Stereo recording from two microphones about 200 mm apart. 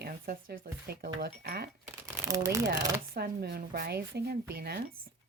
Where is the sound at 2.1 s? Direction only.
15° right (ahead or behind).